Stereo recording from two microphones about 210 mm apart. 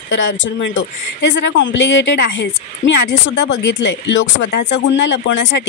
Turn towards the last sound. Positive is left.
turn(degrees=60)  # may be behind; listen again after turning